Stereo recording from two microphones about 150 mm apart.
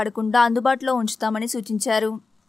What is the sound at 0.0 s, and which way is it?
Speech, centre (ahead or behind).